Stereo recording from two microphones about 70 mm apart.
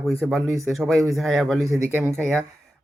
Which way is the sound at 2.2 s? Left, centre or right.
Centre.